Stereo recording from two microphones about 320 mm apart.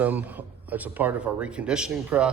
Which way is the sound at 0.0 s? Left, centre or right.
Centre.